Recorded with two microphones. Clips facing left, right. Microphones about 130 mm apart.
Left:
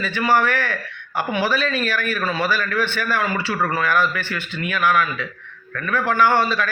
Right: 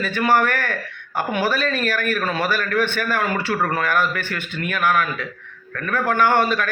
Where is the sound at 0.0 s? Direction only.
50° right (ahead or behind).